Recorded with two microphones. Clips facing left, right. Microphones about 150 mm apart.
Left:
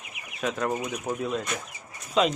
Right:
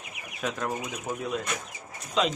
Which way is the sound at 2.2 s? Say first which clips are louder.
Left 3 dB; 5° left (ahead or behind).